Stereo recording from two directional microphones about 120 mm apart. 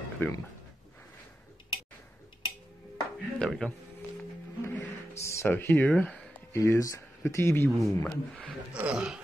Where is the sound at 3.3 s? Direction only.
5° left (ahead or behind).